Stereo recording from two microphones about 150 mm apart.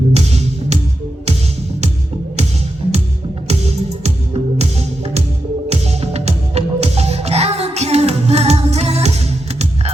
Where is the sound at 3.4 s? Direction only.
45° right (ahead or behind).